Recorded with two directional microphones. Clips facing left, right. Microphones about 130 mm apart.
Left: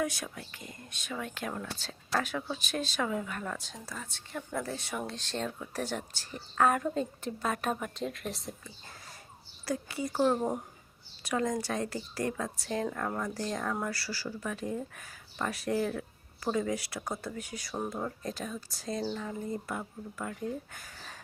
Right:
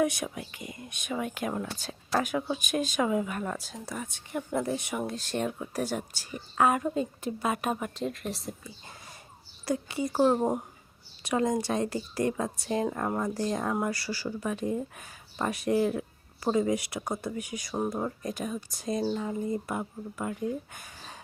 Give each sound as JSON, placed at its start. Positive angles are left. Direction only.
{"t": 0.0, "sound": "speech", "side_deg": -20}
{"t": 9.6, "sound": "speech", "side_deg": -20}